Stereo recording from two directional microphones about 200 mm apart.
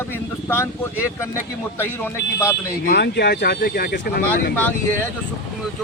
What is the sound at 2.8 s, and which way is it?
Speech, 55° left (ahead or behind).